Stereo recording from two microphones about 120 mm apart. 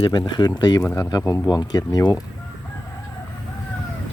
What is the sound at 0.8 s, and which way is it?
Speech, 20° left (ahead or behind).